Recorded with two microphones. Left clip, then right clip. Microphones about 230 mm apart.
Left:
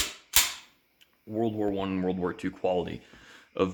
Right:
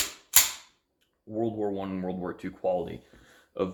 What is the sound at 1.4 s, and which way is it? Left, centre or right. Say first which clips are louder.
Speech: left 1 dB; left.